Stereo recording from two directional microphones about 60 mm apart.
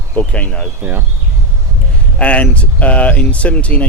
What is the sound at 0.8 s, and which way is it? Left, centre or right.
Speech, right.